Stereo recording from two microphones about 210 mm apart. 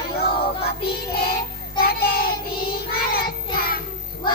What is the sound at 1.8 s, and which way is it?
Child singing, 45° left (ahead or behind).